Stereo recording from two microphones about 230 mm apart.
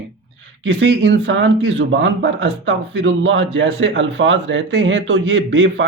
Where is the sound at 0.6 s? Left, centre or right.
Right.